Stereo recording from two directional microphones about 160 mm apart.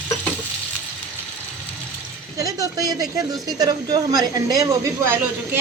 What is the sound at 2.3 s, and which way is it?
Speech, 20° right (ahead or behind).